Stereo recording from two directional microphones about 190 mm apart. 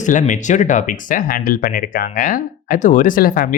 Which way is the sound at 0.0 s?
40° left (ahead or behind).